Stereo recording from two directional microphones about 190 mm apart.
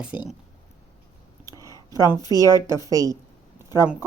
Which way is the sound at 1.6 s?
20° left (ahead or behind).